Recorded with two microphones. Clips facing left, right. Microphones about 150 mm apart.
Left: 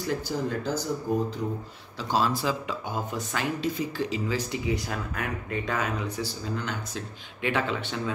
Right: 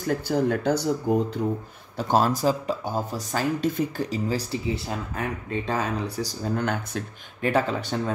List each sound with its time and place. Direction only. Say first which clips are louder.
0.0 s speech: right 5 dB; 55° right (ahead or behind)
2.0 s speech: right 4 dB; 50° right (ahead or behind); by 6.0 s 30° right (ahead or behind)
6.1 s speech: right 4 dB; 45° right (ahead or behind)
7.4 s speech: right 4 dB; 40° right (ahead or behind)